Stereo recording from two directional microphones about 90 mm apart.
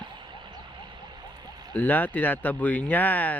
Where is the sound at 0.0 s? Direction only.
60° right (ahead or behind).